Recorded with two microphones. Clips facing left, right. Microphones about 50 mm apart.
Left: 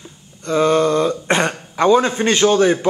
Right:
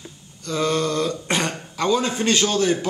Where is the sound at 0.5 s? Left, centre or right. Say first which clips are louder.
Left 7 dB; left.